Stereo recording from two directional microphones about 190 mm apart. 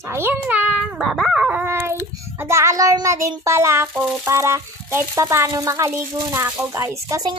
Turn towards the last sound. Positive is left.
turn(degrees=-20)  # may be behind; listen again after turning